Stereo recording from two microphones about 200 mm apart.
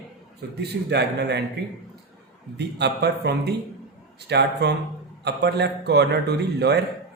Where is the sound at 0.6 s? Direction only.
55° right (ahead or behind).